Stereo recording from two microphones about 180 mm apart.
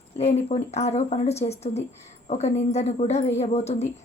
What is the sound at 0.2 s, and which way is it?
A woman's voice, 35° left (ahead or behind).